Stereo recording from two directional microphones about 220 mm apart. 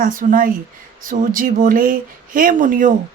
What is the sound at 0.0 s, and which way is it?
A woman's voice, 35° right (ahead or behind).